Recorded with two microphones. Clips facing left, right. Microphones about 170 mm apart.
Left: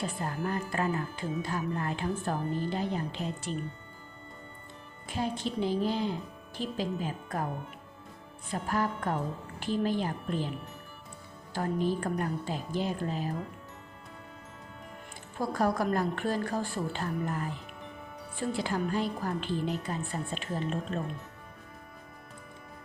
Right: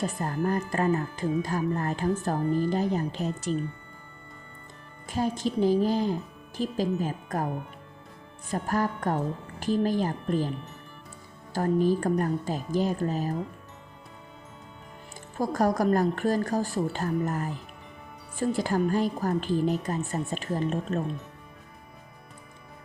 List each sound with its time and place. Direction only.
0.0 s a woman's voice: 45° right (ahead or behind)
5.0 s a woman's voice: 45° right (ahead or behind)
8.4 s a woman's voice: 45° right (ahead or behind)
11.5 s a woman's voice: 40° right (ahead or behind)
15.4 s a woman's voice: 40° right (ahead or behind)